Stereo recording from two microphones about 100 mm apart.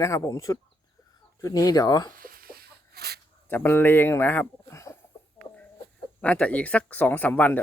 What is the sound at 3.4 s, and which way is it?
Speech, 20° left (ahead or behind).